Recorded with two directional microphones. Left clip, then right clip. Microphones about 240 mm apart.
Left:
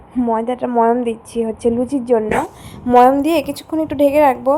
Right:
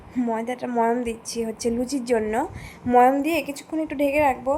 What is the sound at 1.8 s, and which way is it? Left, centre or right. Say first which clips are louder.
Speech: left 7 dB; left.